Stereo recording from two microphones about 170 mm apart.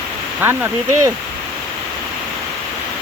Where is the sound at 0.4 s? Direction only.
10° right (ahead or behind).